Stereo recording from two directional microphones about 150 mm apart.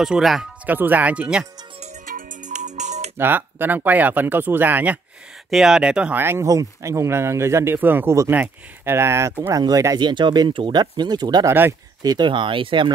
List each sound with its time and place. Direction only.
0.0 s speech: centre (ahead or behind)
2.0 s music: 65° right (ahead or behind)
3.2 s speech: 15° right (ahead or behind); by 12.9 s 35° right (ahead or behind)